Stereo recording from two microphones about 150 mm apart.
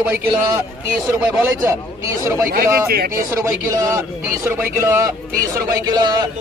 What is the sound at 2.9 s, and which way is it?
Speech, 90° right.